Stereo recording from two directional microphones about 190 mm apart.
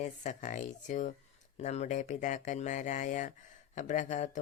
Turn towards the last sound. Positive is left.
turn(degrees=40)  # may be behind; listen again after turning